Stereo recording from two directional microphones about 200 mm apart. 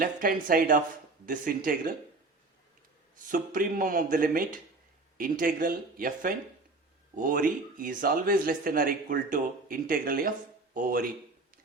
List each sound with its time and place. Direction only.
0.0 s speech: 45° right (ahead or behind)
3.2 s speech: 40° right (ahead or behind)